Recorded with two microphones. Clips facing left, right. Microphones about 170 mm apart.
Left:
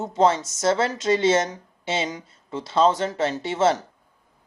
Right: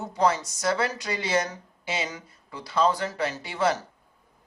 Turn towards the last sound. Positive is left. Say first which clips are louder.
# left 5 dB
turn(degrees=25)  # may be behind; listen again after turning